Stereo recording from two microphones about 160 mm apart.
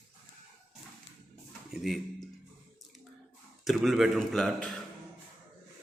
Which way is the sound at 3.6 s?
Centre (ahead or behind).